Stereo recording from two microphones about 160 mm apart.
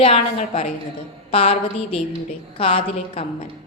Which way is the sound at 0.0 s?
40° left (ahead or behind).